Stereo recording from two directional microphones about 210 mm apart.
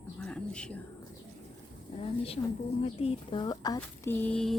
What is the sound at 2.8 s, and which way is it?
Speech, 30° left (ahead or behind).